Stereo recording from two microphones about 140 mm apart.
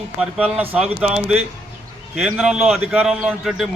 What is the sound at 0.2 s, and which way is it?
A man's voice, 10° right (ahead or behind).